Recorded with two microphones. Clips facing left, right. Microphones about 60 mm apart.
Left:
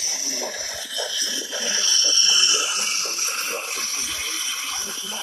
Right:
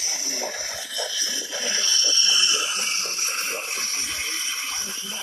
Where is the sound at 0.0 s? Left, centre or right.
Right.